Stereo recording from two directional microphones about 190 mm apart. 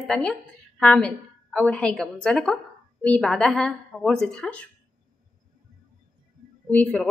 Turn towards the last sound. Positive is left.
turn(degrees=5)  # may be behind; listen again after turning